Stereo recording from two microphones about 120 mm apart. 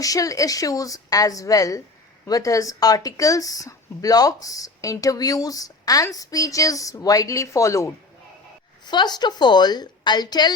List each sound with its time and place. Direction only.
0.0 s speech: 30° left (ahead or behind)
8.8 s a woman's voice: 35° left (ahead or behind)